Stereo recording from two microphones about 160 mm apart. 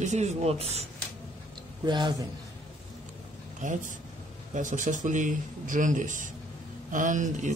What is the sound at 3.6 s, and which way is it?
A man's voice, 50° right (ahead or behind).